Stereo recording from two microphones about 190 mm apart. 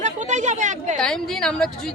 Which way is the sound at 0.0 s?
40° right (ahead or behind).